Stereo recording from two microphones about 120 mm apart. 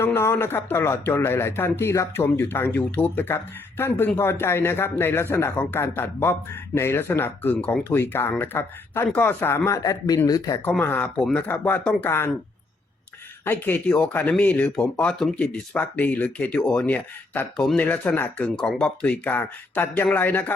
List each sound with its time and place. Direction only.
0.0 s speech: 20° left (ahead or behind)
10.6 s speech: 15° left (ahead or behind)
13.4 s speech: 20° left (ahead or behind)